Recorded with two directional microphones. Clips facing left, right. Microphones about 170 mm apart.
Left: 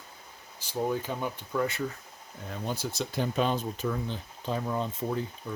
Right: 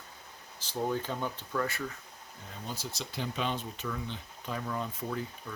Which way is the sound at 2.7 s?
55° left (ahead or behind).